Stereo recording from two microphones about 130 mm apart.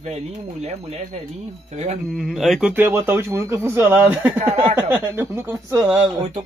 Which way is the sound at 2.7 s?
15° right (ahead or behind).